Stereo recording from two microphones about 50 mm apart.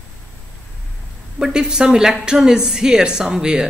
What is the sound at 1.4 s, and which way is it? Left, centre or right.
Speech, centre.